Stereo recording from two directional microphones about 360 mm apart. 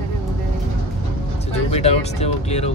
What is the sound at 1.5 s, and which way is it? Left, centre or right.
Speech, centre.